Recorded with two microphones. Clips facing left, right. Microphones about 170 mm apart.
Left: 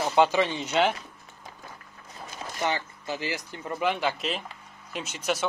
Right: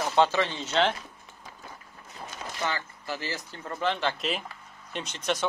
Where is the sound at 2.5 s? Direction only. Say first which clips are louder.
Left 4 dB; 20° left (ahead or behind).